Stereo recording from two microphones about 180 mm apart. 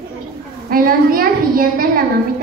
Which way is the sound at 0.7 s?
55° right (ahead or behind).